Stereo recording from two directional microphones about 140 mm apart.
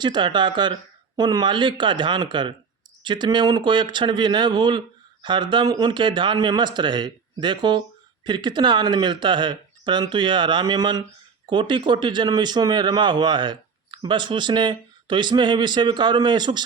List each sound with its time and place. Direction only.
0.0 s speech: 35° right (ahead or behind)